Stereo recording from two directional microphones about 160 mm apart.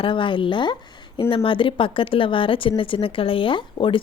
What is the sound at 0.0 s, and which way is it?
A woman's voice, 30° left (ahead or behind).